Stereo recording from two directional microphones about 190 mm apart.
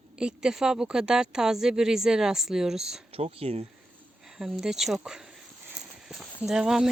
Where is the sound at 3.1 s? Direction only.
30° right (ahead or behind).